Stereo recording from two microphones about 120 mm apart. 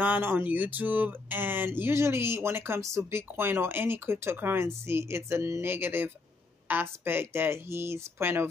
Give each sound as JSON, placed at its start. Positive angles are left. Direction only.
{"t": 0.0, "sound": "speech", "side_deg": -15}